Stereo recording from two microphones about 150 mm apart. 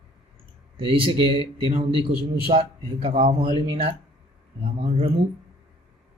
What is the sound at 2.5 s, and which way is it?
Speech, 40° right (ahead or behind).